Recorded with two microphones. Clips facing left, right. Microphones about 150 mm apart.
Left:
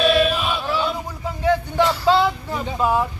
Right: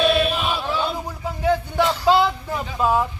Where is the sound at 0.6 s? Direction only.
15° right (ahead or behind).